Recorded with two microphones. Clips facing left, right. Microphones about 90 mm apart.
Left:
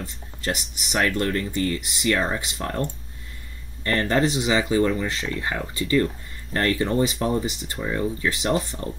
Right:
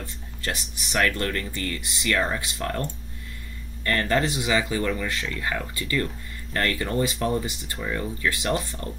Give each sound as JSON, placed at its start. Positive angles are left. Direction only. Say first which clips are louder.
{"t": 0.0, "sound": "speech", "louder": "left 3 dB", "side_deg": 20}